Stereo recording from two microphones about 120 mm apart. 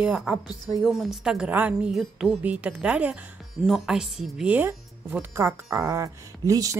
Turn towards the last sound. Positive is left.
turn(degrees=-30)  # may be behind; listen again after turning